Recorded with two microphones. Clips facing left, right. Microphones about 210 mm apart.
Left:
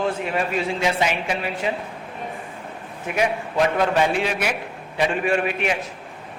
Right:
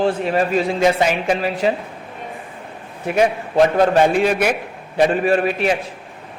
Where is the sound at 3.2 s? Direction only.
35° right (ahead or behind).